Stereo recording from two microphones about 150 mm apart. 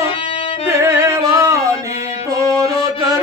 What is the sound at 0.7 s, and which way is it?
Music, 20° right (ahead or behind).